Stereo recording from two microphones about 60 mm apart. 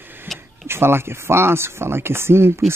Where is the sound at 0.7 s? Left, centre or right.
Right.